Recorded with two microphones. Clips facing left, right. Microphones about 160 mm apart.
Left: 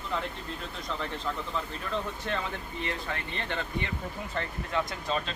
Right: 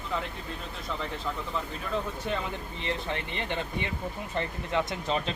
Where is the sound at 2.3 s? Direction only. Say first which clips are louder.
Right 1 dB; 10° right (ahead or behind).